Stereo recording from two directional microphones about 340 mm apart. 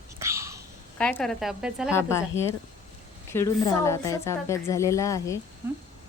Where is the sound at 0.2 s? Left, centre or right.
Centre.